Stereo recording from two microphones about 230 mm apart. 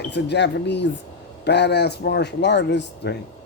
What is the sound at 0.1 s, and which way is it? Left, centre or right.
A man's voice, left.